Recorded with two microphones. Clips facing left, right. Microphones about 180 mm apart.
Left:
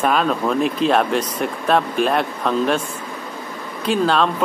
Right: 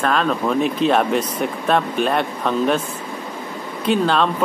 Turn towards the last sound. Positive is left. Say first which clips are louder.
# even
turn(degrees=0)  # may be behind; listen again after turning